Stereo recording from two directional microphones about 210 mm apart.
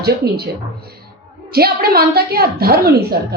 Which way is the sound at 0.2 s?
50° right (ahead or behind).